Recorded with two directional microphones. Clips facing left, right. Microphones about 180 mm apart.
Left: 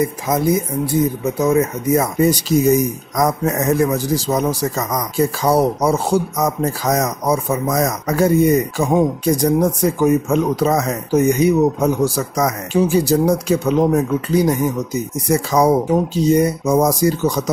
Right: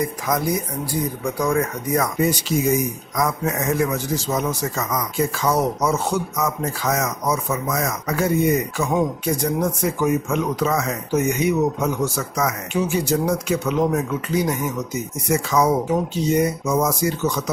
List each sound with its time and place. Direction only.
0.0 s speech: 25° left (ahead or behind)
2.1 s speech: 40° left (ahead or behind)